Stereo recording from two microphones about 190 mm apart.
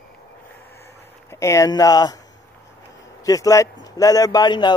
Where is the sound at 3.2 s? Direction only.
20° left (ahead or behind).